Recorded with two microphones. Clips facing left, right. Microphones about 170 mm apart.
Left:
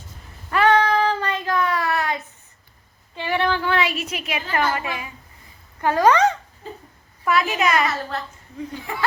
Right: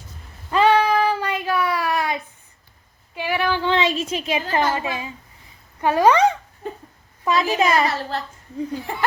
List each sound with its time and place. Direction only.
0.5 s child singing: 10° right (ahead or behind)
3.2 s female singing: 10° right (ahead or behind)
3.6 s a woman's voice: 25° right (ahead or behind)
7.3 s a woman's voice: 25° right (ahead or behind)